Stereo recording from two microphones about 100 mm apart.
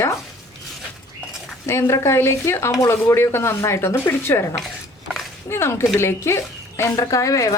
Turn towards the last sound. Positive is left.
turn(degrees=35)  # may be behind; listen again after turning